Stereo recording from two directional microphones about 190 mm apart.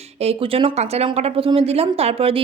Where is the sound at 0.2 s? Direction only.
30° right (ahead or behind).